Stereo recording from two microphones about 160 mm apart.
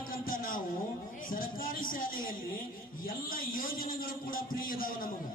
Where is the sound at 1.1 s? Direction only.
60° left (ahead or behind).